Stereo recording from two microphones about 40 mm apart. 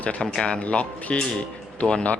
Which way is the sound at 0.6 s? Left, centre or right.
Left.